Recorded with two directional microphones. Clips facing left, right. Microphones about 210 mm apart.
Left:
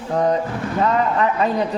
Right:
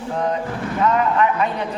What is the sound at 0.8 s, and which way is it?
Speech, 35° left (ahead or behind).